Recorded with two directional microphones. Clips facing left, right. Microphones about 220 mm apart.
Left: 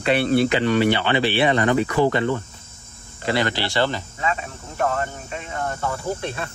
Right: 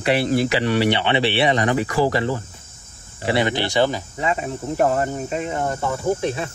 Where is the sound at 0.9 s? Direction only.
25° right (ahead or behind).